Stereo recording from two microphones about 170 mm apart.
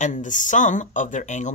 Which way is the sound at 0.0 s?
45° left (ahead or behind).